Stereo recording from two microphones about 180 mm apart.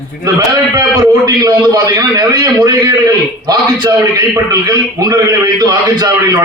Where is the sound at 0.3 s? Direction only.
20° right (ahead or behind).